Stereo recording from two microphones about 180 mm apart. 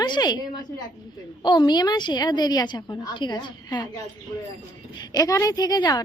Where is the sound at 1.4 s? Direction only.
25° left (ahead or behind).